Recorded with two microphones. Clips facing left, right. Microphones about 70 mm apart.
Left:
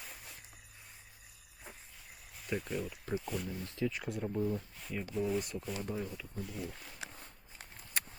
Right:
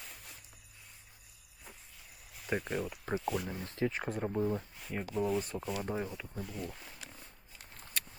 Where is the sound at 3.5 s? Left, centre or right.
Right.